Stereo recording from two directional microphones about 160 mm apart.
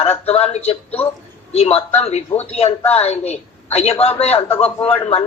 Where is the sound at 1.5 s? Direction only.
40° left (ahead or behind).